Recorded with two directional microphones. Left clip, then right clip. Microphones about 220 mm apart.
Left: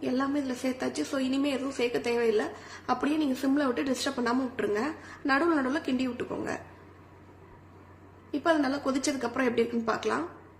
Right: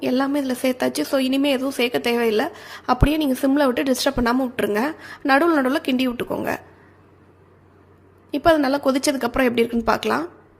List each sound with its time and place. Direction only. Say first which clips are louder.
0.0 s a woman's voice: right 8 dB; 40° right (ahead or behind)
8.3 s a woman's voice: right 9 dB; 40° right (ahead or behind)